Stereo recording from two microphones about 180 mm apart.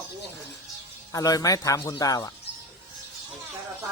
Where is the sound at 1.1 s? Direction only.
20° left (ahead or behind).